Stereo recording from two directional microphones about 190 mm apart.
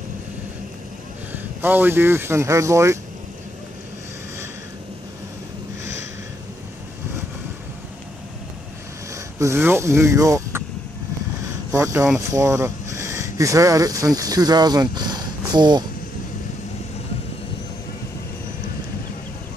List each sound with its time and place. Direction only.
1.3 s speech: 10° right (ahead or behind)
9.1 s speech: 15° right (ahead or behind)
11.4 s vehicle: 15° right (ahead or behind)
12.3 s speech: 15° right (ahead or behind)